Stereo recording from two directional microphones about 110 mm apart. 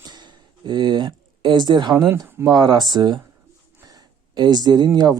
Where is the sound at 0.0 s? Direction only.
40° right (ahead or behind).